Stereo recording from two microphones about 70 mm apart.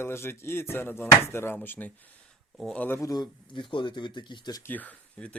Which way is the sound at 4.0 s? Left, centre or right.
Left.